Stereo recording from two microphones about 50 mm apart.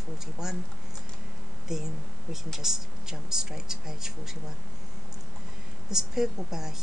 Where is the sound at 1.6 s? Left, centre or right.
Centre.